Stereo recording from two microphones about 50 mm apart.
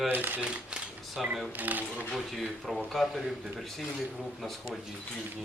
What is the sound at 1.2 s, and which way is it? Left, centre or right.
Speech, centre.